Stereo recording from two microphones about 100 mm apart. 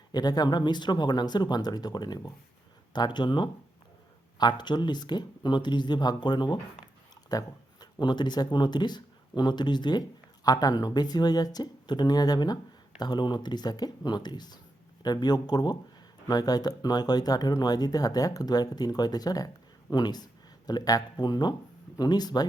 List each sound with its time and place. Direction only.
0.1 s speech: 40° left (ahead or behind)